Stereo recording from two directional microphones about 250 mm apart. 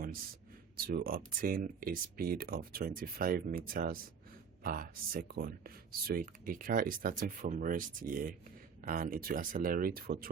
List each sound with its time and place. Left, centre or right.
0.8 s speech: right